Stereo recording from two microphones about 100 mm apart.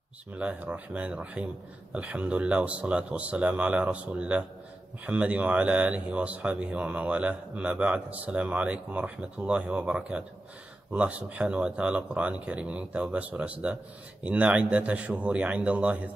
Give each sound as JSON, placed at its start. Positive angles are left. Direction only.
{"t": 0.4, "sound": "speech", "side_deg": -15}